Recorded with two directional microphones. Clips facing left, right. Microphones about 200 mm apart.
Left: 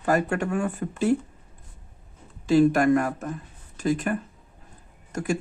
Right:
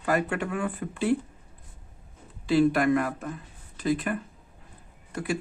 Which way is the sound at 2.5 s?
45° left (ahead or behind).